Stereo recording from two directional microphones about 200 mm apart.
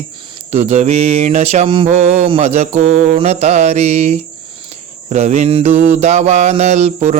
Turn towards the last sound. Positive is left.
turn(degrees=-35)  # may be behind; listen again after turning